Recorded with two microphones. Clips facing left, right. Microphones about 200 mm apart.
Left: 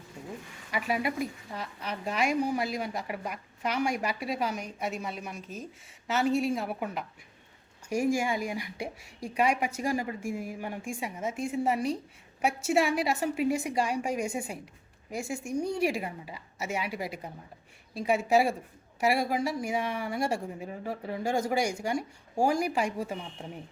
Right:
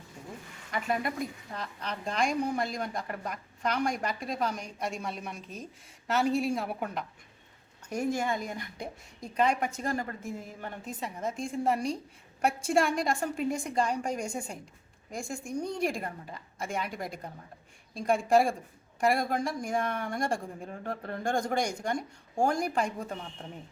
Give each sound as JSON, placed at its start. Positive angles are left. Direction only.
{"t": 0.7, "sound": "a woman's voice", "side_deg": 5}